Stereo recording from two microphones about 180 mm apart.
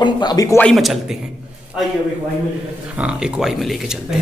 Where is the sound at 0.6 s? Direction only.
Centre (ahead or behind).